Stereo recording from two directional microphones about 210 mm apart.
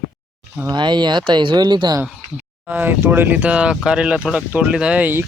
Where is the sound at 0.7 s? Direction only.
20° right (ahead or behind).